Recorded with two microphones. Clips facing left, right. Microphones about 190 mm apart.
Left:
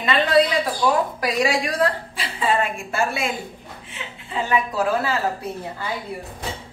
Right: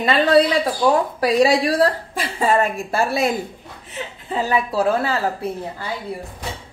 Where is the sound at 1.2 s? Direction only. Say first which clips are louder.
Right 6 dB; 35° right (ahead or behind).